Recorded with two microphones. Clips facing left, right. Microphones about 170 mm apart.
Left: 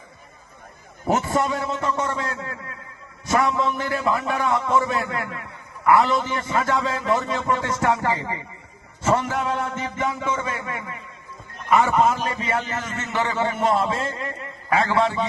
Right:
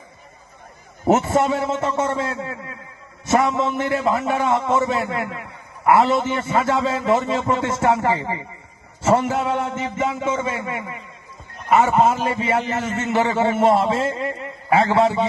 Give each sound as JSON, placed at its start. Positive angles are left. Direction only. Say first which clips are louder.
{"t": 1.0, "sound": "a man's voice", "louder": "right 5 dB", "side_deg": -25}